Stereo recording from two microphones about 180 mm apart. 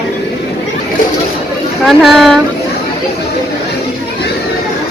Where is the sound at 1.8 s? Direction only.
Centre (ahead or behind).